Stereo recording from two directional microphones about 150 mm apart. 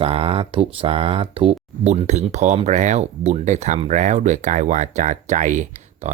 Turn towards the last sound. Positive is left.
turn(degrees=-55)  # may be behind; listen again after turning